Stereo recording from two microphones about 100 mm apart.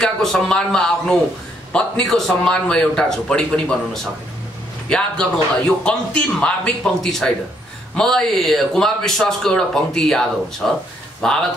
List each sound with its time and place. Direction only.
0.0 s a man's voice: 5° left (ahead or behind)